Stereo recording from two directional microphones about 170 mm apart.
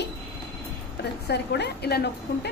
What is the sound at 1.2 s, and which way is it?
A woman's voice, 75° left (ahead or behind).